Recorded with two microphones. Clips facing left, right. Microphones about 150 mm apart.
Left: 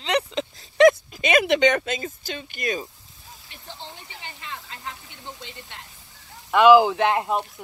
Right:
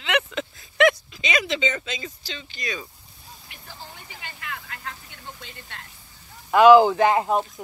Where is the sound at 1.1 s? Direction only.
55° left (ahead or behind).